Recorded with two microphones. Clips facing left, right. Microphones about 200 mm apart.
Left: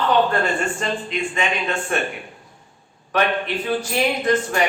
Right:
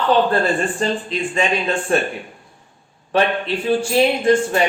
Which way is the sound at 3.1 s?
30° right (ahead or behind).